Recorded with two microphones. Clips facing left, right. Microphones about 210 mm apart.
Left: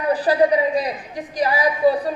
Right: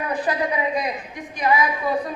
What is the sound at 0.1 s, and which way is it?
A man's voice, 35° left (ahead or behind).